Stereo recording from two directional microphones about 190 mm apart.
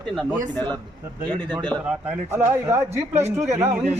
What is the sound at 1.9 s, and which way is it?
A man's voice, 15° right (ahead or behind).